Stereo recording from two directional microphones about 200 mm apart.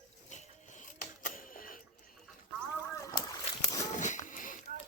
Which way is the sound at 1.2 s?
45° left (ahead or behind).